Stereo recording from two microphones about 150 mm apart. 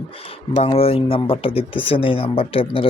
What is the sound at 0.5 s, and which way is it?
Speech, 40° left (ahead or behind).